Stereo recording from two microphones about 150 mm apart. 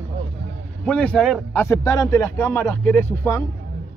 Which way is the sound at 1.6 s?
20° left (ahead or behind).